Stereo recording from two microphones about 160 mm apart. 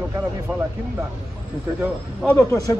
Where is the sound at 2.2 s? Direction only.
15° left (ahead or behind).